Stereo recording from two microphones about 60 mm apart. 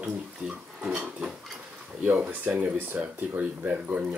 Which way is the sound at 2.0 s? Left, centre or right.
Right.